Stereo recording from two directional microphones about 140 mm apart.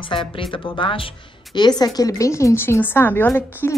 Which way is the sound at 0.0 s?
35° left (ahead or behind).